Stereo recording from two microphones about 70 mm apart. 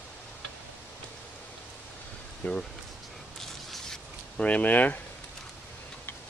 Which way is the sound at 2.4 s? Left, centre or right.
Left.